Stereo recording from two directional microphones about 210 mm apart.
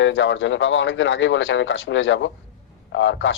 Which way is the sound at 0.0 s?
60° left (ahead or behind).